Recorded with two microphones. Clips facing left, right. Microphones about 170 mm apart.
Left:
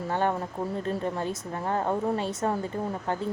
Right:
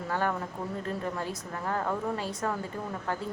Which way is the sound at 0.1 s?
25° left (ahead or behind).